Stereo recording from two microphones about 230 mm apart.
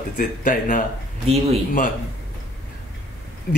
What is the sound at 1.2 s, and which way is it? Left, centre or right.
Speech, right.